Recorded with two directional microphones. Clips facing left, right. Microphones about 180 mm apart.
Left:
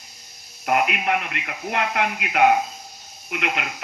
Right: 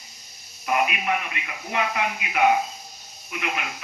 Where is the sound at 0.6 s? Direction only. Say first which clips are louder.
Left 3 dB; 60° left (ahead or behind).